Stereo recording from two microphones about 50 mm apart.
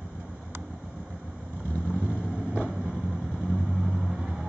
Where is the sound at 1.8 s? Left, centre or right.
Centre.